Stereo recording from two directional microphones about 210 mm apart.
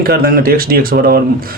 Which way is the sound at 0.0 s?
45° right (ahead or behind).